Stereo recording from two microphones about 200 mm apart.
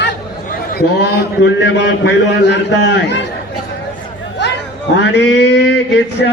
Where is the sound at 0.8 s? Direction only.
55° left (ahead or behind).